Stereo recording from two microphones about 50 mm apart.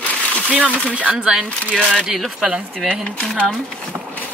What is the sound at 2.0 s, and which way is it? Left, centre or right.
Speech, centre.